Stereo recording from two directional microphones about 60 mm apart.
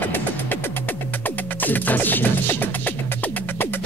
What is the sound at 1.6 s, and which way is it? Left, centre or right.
Music, left.